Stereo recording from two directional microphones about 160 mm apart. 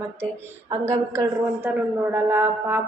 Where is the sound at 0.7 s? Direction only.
20° right (ahead or behind).